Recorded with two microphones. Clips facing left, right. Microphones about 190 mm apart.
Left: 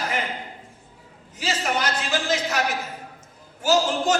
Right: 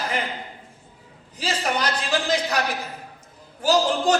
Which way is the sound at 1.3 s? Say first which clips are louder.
Even; 35° right (ahead or behind).